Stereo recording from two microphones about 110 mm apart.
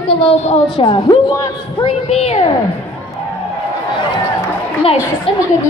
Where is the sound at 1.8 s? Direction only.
70° left (ahead or behind).